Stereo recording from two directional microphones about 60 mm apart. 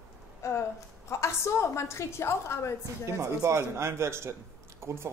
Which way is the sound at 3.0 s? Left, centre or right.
Right.